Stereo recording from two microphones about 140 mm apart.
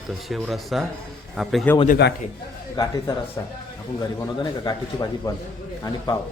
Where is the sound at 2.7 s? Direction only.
30° left (ahead or behind).